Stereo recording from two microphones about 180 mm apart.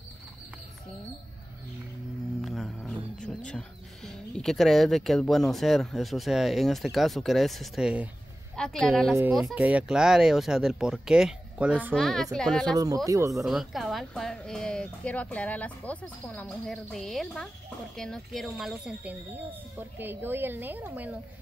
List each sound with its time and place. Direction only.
2.4 s speech: centre (ahead or behind)
12.7 s speech: 20° right (ahead or behind)
13.4 s a woman's voice: centre (ahead or behind)